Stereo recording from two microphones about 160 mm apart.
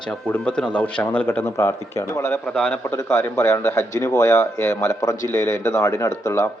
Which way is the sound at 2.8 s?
15° left (ahead or behind).